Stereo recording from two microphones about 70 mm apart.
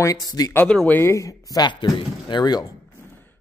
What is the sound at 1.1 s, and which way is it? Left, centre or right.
Speech, left.